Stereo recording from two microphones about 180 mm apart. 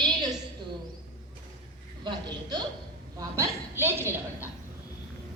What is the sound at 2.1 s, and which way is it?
A woman's voice, 25° right (ahead or behind).